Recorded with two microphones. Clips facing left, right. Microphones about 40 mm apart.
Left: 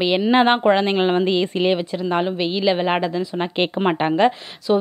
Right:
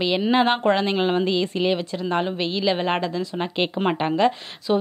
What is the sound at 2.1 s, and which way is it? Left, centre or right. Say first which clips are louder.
Speech: left 3 dB; centre.